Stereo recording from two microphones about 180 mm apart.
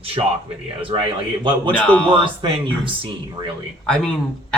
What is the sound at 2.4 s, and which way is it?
Speech, 30° right (ahead or behind).